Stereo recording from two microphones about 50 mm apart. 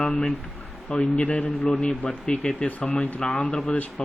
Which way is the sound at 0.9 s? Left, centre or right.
Left.